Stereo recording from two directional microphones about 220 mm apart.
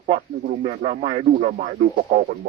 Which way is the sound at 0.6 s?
25° right (ahead or behind).